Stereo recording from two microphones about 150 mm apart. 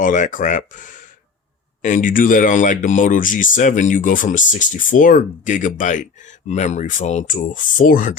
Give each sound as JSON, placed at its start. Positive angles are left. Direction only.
{"t": 0.0, "sound": "speech", "side_deg": 60}